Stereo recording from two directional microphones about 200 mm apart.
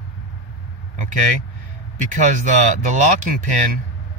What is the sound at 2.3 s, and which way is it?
Speech, 40° right (ahead or behind).